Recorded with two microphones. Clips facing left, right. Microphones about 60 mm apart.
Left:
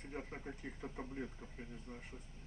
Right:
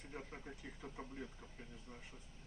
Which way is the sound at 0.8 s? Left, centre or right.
Centre.